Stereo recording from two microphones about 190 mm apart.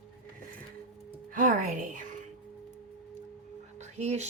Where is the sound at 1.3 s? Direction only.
45° right (ahead or behind).